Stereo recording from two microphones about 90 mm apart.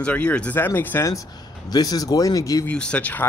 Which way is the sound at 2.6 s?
15° left (ahead or behind).